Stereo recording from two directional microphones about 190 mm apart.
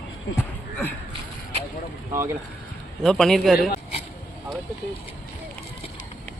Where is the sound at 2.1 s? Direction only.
15° right (ahead or behind).